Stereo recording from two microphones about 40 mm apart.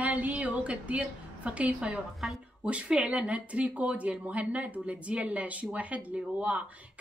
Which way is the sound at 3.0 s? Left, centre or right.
Right.